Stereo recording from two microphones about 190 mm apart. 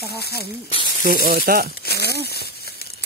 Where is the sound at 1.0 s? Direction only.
50° right (ahead or behind).